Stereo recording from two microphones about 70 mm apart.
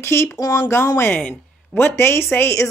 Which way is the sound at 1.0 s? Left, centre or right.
Left.